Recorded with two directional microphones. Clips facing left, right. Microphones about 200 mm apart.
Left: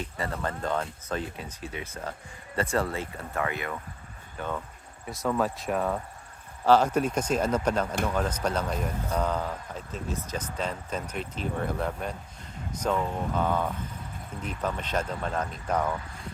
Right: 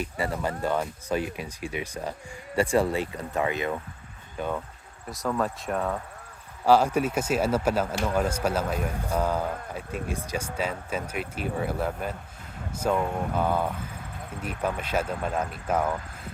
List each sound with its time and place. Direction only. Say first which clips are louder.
0.0 s speech: right 3 dB; 10° right (ahead or behind)
5.0 s speech: left 1 dB; centre (ahead or behind)
6.7 s speech: right 1 dB; 10° right (ahead or behind)